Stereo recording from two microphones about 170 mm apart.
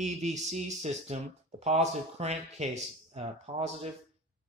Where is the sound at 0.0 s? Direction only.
45° right (ahead or behind).